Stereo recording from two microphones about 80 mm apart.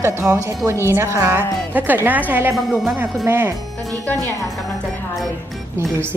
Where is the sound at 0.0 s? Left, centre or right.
Right.